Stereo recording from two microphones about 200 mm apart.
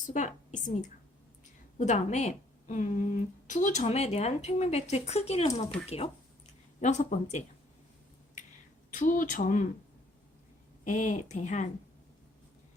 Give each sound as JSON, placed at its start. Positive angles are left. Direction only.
{"t": 0.0, "sound": "a woman's voice", "side_deg": 40}
{"t": 6.8, "sound": "speech", "side_deg": 35}
{"t": 8.9, "sound": "speech", "side_deg": 40}
{"t": 10.8, "sound": "speech", "side_deg": 40}